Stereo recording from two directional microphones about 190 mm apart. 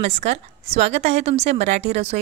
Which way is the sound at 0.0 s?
35° right (ahead or behind).